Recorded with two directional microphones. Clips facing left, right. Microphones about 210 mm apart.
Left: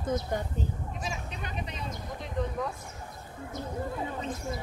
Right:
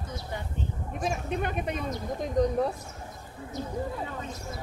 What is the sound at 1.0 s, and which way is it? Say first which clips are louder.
Speech: right 12 dB; 55° right (ahead or behind).